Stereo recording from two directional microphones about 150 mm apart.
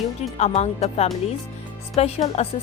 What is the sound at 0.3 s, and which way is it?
Speech, 45° left (ahead or behind).